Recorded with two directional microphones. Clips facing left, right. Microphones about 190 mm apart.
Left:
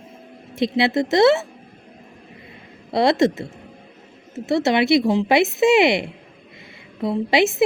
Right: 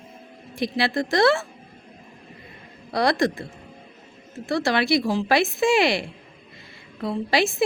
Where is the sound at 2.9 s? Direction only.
25° left (ahead or behind).